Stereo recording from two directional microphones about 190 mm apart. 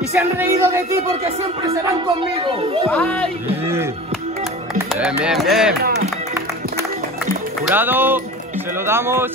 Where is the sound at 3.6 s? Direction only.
15° right (ahead or behind).